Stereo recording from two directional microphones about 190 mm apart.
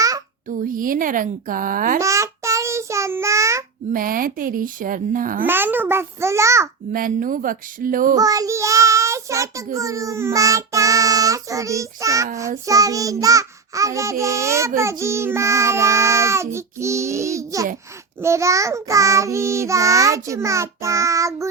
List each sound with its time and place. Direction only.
0.4 s a woman's voice: 45° right (ahead or behind)
2.0 s child singing: 15° right (ahead or behind)
3.9 s a woman's voice: 50° right (ahead or behind)
5.5 s child singing: 10° right (ahead or behind)
6.9 s a woman's voice: 45° right (ahead or behind)
8.1 s a child's voice: 20° right (ahead or behind)
9.7 s child singing: 15° right (ahead or behind)